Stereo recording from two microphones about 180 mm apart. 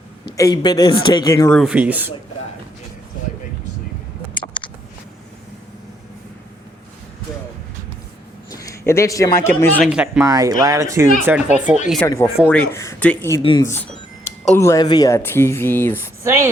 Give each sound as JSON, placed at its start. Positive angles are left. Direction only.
{"t": 0.3, "sound": "speech", "side_deg": 20}
{"t": 1.5, "sound": "speech", "side_deg": -5}
{"t": 8.4, "sound": "speech", "side_deg": 20}
{"t": 9.8, "sound": "speech", "side_deg": -5}
{"t": 10.2, "sound": "speech", "side_deg": -20}
{"t": 12.0, "sound": "speech", "side_deg": 15}
{"t": 13.4, "sound": "speech", "side_deg": 25}
{"t": 14.5, "sound": "speech", "side_deg": 15}
{"t": 16.2, "sound": "a woman's voice", "side_deg": -15}